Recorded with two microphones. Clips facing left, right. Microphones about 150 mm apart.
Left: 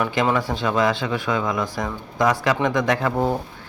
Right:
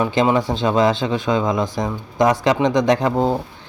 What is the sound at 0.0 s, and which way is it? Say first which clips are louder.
Speech: right 4 dB; 25° right (ahead or behind).